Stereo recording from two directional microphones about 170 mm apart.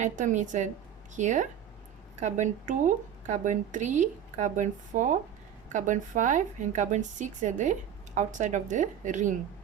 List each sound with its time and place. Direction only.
0.0 s a woman's voice: 45° right (ahead or behind)